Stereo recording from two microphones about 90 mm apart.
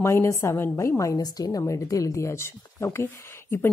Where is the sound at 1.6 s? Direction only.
35° left (ahead or behind).